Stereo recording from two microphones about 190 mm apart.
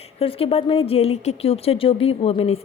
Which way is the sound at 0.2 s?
30° left (ahead or behind).